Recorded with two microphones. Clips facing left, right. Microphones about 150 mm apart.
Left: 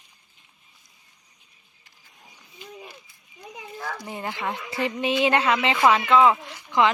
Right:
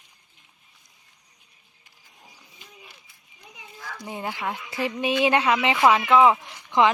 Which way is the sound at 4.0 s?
15° right (ahead or behind).